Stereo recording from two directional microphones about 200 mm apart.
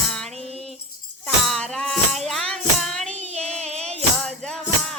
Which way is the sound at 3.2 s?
35° right (ahead or behind).